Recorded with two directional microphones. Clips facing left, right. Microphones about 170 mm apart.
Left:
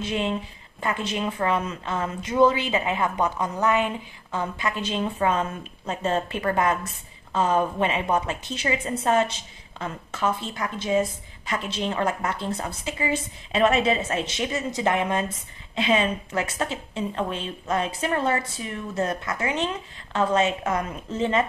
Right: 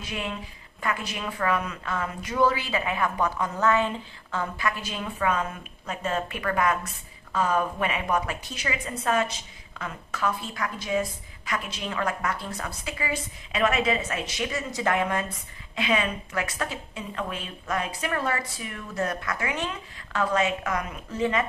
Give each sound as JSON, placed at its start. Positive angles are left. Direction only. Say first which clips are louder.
{"t": 0.0, "sound": "a woman's voice", "louder": "left 7 dB", "side_deg": 25}